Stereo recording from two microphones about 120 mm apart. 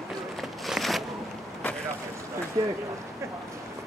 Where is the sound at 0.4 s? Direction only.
Centre (ahead or behind).